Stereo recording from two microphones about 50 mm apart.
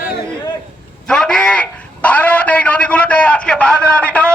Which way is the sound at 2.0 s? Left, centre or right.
Left.